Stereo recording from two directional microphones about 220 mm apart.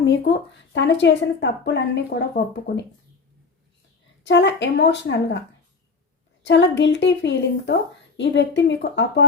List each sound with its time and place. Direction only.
0.3 s a woman's voice: 50° left (ahead or behind)
4.2 s a woman's voice: 55° left (ahead or behind)
6.4 s a woman's voice: 55° left (ahead or behind)